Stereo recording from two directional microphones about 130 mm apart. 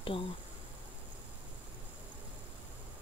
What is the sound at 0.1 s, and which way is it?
Speech, 40° left (ahead or behind).